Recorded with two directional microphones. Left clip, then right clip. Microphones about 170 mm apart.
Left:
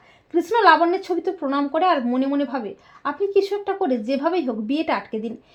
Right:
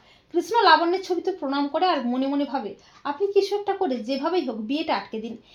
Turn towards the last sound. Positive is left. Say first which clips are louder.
# left 3 dB
turn(degrees=40)  # may be behind; listen again after turning